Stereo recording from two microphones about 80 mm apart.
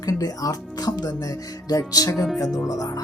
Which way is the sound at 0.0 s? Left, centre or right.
Left.